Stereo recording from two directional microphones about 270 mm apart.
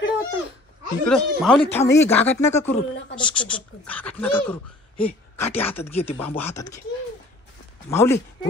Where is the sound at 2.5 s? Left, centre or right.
Left.